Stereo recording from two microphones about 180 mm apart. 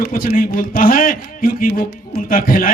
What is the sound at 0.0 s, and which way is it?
A man's voice, 55° left (ahead or behind).